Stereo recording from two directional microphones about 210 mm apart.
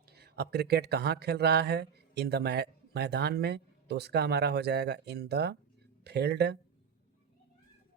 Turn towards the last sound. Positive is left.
turn(degrees=-50)  # may be behind; listen again after turning